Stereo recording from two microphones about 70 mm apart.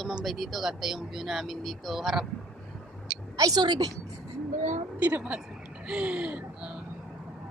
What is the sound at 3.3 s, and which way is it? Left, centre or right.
Speech, right.